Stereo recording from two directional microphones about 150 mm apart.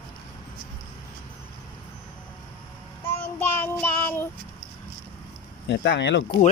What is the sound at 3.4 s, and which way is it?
Child singing, 15° left (ahead or behind).